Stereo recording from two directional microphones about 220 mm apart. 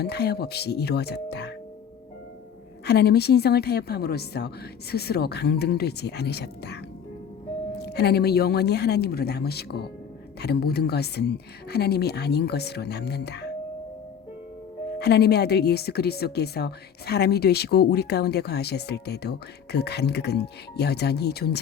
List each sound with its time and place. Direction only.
0.0 s speech: 45° left (ahead or behind)
2.8 s speech: 50° left (ahead or behind)
7.8 s speech: 50° left (ahead or behind)
14.9 s speech: 50° left (ahead or behind)